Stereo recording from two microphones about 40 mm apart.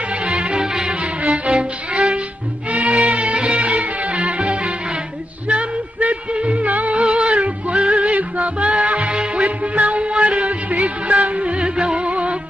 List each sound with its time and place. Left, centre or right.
0.1 s music: right
1.2 s music: right